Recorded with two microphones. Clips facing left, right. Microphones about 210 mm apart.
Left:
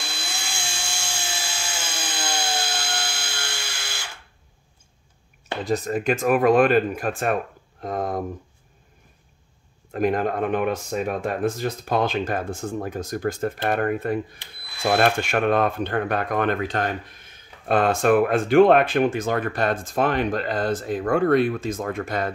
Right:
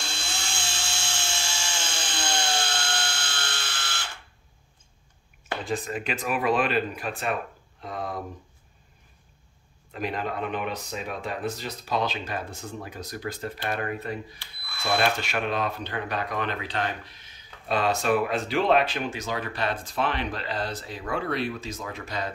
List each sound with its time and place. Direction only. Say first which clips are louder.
0.0 s tools: left 1 dB; 10° left (ahead or behind)
5.6 s speech: left 7 dB; 40° left (ahead or behind)
9.9 s speech: left 8 dB; 50° left (ahead or behind)